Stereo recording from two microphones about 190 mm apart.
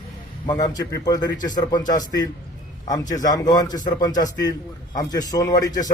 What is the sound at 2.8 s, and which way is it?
A man's voice, 20° left (ahead or behind).